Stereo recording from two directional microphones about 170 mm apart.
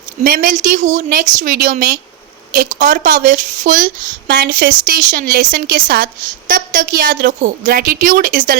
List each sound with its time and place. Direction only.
0.3 s a woman's voice: 55° right (ahead or behind)